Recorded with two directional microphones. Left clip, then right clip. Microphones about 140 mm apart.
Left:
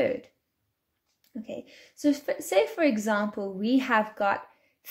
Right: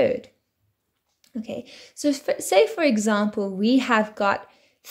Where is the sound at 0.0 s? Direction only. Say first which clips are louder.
Right 6 dB; 20° right (ahead or behind).